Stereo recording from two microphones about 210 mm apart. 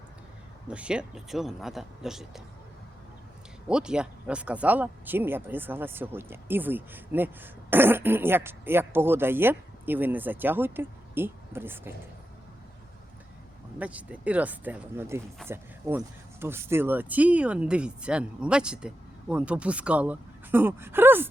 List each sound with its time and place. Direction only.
0.7 s speech: 5° right (ahead or behind)
3.7 s speech: 5° right (ahead or behind)
13.7 s speech: 5° right (ahead or behind)